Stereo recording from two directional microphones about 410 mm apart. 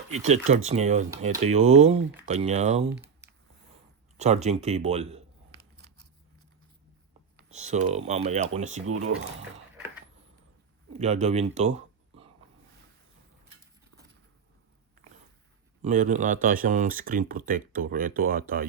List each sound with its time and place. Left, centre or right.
0.1 s speech: centre
4.2 s speech: centre
7.3 s speech: centre
10.9 s speech: centre
15.8 s speech: centre